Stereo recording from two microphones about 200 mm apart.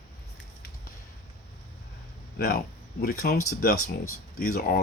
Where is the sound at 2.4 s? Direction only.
50° left (ahead or behind).